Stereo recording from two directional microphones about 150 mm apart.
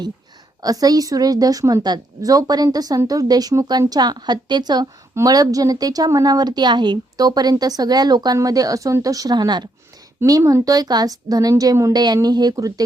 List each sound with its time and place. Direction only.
0.6 s a woman's voice: 25° right (ahead or behind)